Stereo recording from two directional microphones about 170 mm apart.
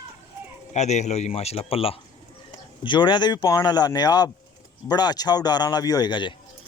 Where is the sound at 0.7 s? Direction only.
40° left (ahead or behind); by 6.3 s 25° left (ahead or behind).